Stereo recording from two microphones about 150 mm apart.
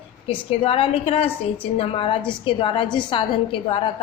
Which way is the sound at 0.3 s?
40° left (ahead or behind).